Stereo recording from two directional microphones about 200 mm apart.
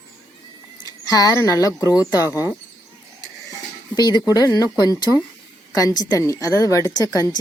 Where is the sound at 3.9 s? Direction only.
20° left (ahead or behind).